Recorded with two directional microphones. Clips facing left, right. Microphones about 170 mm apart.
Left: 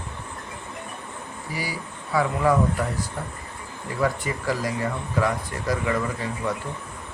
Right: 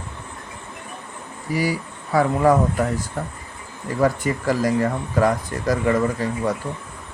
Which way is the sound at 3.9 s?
45° right (ahead or behind).